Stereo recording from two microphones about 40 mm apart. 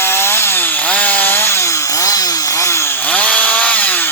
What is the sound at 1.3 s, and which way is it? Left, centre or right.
Wood, left.